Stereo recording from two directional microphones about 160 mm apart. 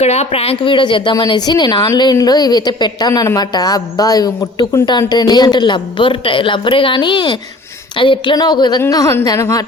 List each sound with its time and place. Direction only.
0.0 s speech: 40° left (ahead or behind); by 9.6 s 20° left (ahead or behind)